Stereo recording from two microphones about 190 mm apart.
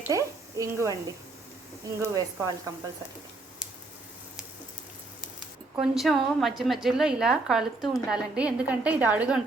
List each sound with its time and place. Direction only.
0.0 s a woman's voice: 15° right (ahead or behind)
5.7 s a woman's voice: centre (ahead or behind)